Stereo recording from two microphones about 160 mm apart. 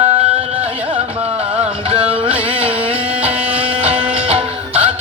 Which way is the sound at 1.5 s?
5° right (ahead or behind).